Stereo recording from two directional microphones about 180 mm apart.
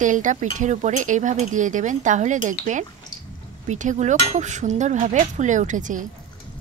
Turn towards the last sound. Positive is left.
turn(degrees=-45)  # may be behind; listen again after turning